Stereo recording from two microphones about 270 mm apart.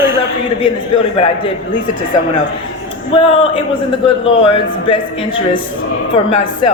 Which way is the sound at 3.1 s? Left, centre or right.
Centre.